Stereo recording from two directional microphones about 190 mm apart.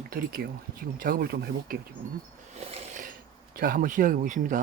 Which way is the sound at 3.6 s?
45° right (ahead or behind).